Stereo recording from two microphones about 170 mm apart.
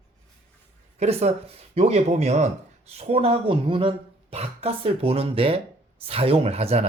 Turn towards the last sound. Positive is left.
turn(degrees=-40)  # may be behind; listen again after turning